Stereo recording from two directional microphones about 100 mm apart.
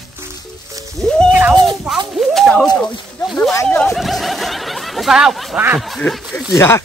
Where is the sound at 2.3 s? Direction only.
5° left (ahead or behind).